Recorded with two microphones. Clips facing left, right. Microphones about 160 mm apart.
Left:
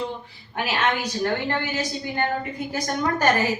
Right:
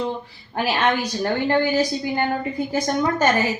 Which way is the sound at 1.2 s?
35° right (ahead or behind).